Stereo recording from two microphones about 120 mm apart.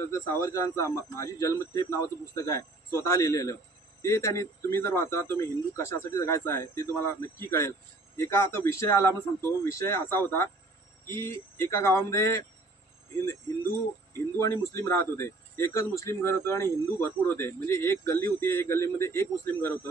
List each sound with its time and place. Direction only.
0.1 s speech: 25° left (ahead or behind)
14.4 s speech: 25° left (ahead or behind)